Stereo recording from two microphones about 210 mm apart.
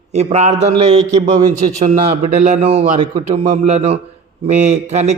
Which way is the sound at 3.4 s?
35° right (ahead or behind).